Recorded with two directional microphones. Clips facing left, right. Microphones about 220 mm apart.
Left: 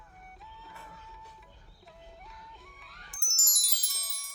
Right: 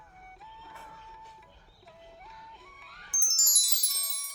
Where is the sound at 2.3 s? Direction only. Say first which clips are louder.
Even; centre (ahead or behind).